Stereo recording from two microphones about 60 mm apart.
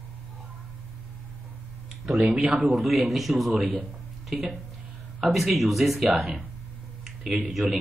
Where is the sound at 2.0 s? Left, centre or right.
Centre.